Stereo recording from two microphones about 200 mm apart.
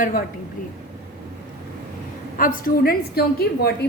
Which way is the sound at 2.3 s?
45° left (ahead or behind).